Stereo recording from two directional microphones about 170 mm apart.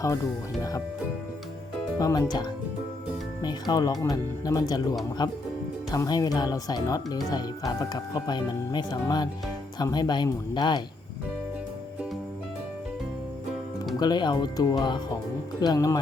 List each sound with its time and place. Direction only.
2.0 s speech: 20° left (ahead or behind)
14.0 s speech: 25° left (ahead or behind)